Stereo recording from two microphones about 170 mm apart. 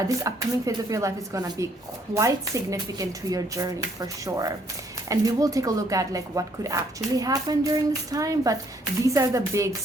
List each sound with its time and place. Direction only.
0.2 s speech: 20° right (ahead or behind)